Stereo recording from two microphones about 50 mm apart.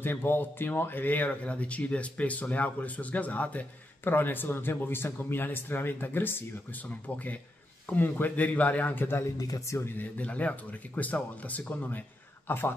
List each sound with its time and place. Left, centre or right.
0.0 s speech: left
4.0 s a man's voice: left
9.0 s speech: left
9.8 s speech: left
12.4 s a man's voice: left